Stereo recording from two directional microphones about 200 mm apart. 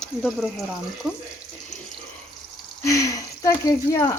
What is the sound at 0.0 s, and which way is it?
Speech, centre (ahead or behind).